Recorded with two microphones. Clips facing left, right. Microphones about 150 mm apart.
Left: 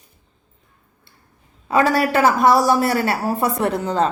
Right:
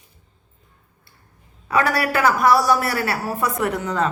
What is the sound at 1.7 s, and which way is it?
A woman's voice, 25° left (ahead or behind).